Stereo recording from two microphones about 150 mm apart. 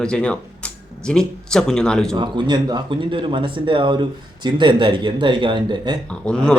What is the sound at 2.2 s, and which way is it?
Speech, 30° right (ahead or behind).